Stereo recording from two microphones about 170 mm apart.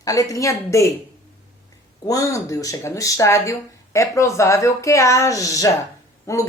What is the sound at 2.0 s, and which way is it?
A woman's voice, 20° left (ahead or behind).